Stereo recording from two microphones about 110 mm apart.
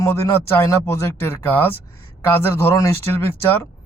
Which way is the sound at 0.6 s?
25° left (ahead or behind).